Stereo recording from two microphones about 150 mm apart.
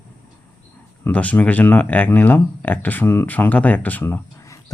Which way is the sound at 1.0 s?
10° left (ahead or behind).